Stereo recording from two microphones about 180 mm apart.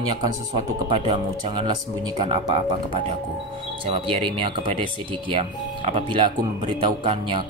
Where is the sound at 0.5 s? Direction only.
35° right (ahead or behind).